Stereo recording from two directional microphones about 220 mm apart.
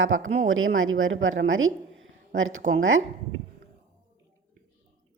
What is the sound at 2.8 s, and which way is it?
Speech, 65° right (ahead or behind).